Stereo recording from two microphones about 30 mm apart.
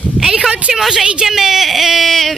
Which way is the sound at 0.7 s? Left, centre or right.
Centre.